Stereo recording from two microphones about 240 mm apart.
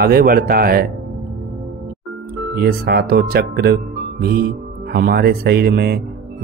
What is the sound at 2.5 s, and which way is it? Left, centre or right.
Speech, right.